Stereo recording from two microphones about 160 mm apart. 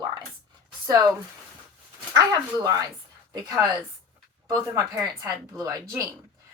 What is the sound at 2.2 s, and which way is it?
A woman's voice, 20° right (ahead or behind).